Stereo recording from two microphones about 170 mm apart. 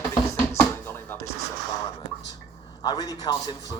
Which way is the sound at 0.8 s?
15° left (ahead or behind).